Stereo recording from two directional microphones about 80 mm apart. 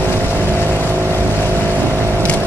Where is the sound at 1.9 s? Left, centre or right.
Right.